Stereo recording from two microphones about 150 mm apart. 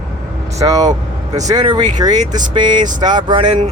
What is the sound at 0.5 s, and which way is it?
Speech, 20° right (ahead or behind).